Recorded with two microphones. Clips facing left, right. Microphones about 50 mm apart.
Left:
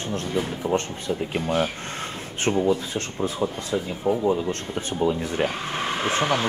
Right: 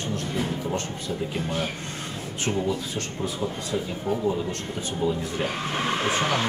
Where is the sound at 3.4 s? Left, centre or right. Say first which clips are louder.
Left 2 dB; left.